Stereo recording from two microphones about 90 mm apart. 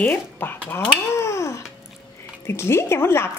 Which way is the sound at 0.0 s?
25° left (ahead or behind).